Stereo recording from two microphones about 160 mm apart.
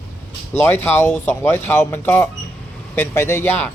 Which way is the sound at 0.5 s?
15° left (ahead or behind).